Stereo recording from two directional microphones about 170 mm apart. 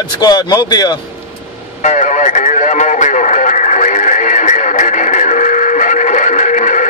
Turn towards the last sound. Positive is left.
turn(degrees=50)  # may be behind; listen again after turning